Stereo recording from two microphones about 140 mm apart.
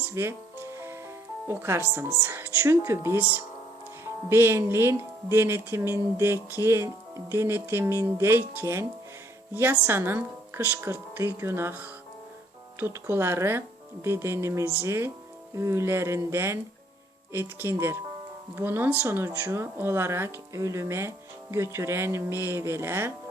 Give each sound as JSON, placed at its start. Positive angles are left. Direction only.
{"t": 0.0, "sound": "speech", "side_deg": -15}